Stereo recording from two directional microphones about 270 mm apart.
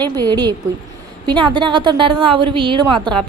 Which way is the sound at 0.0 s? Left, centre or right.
Centre.